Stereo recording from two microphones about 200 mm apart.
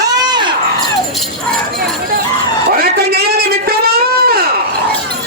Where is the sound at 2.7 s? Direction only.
50° right (ahead or behind).